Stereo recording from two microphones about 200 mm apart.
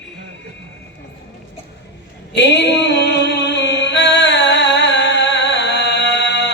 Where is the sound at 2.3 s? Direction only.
60° left (ahead or behind).